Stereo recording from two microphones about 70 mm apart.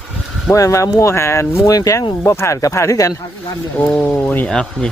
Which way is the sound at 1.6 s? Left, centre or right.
Left.